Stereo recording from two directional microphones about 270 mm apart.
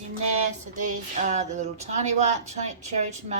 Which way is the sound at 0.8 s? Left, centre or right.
Right.